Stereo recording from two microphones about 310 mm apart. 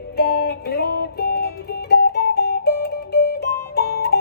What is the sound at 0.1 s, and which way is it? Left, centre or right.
Music, left.